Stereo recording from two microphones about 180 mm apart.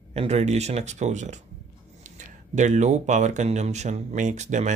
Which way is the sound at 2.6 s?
40° right (ahead or behind).